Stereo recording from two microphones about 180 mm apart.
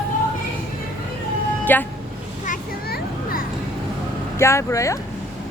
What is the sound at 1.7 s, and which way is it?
Speech, 10° left (ahead or behind).